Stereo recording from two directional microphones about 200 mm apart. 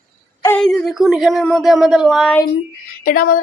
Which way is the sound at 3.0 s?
45° left (ahead or behind).